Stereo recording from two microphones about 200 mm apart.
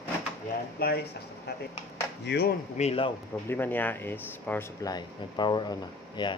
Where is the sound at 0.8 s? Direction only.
50° left (ahead or behind).